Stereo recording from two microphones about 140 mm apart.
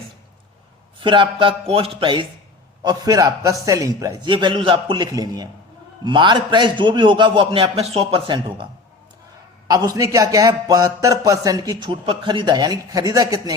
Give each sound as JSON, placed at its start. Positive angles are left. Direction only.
{"t": 0.9, "sound": "a man's voice", "side_deg": -35}
{"t": 2.8, "sound": "a man's voice", "side_deg": -25}
{"t": 9.6, "sound": "a man's voice", "side_deg": -25}
{"t": 11.9, "sound": "a man's voice", "side_deg": -40}